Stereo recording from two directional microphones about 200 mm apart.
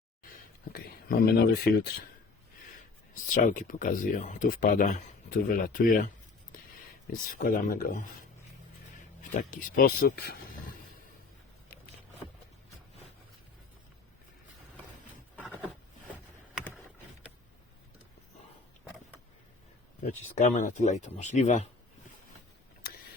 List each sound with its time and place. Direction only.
0.7 s speech: 45° left (ahead or behind)
3.2 s speech: 40° left (ahead or behind)
7.1 s speech: 45° left (ahead or behind)
9.4 s speech: 40° left (ahead or behind)
20.0 s speech: 40° left (ahead or behind)